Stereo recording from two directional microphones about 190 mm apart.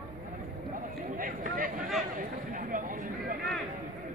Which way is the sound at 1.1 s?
45° right (ahead or behind).